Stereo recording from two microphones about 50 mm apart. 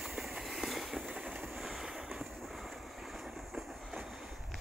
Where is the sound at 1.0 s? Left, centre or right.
Right.